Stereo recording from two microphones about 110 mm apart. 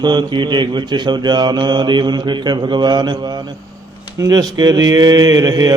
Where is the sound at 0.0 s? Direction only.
40° right (ahead or behind).